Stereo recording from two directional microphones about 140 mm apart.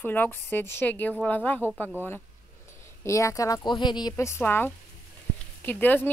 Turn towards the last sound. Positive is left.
turn(degrees=15)  # may be behind; listen again after turning